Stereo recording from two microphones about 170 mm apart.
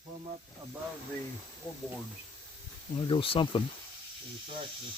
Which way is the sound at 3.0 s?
30° left (ahead or behind).